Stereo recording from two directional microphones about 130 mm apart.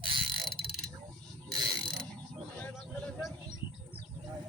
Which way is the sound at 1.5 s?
30° right (ahead or behind).